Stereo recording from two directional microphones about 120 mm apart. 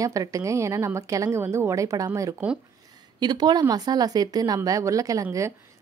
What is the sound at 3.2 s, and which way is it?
Speech, 35° right (ahead or behind).